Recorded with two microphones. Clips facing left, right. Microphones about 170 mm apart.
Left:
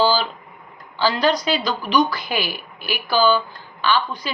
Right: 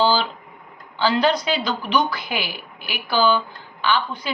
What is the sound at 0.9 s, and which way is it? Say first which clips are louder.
Speech: even; 20° right (ahead or behind).